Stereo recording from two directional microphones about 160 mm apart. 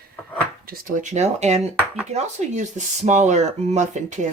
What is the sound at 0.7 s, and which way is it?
Speech, 55° right (ahead or behind).